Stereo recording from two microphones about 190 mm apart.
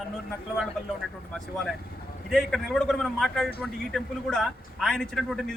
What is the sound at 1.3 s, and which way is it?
A man's voice, centre (ahead or behind).